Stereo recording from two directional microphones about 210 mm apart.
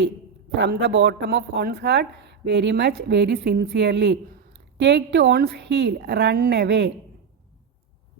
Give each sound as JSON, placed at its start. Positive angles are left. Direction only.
{"t": 0.5, "sound": "speech", "side_deg": -50}